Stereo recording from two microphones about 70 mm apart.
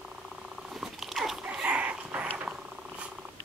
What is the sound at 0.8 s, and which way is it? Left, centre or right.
Dog, centre.